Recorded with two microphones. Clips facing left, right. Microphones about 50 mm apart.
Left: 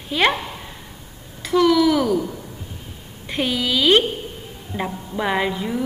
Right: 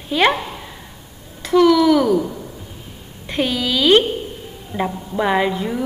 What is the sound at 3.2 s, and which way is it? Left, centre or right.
A woman's voice, centre.